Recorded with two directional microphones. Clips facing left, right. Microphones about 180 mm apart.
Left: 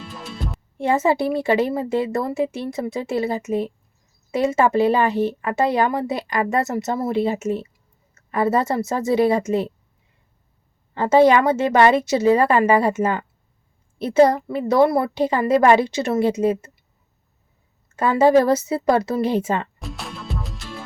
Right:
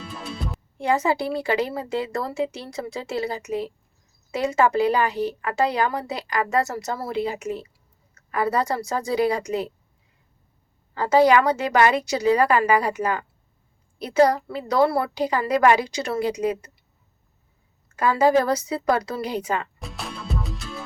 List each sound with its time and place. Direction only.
0.0 s music: centre (ahead or behind)
0.8 s speech: 25° left (ahead or behind)
10.9 s speech: 25° left (ahead or behind)
17.8 s speech: 25° left (ahead or behind)
19.8 s music: centre (ahead or behind)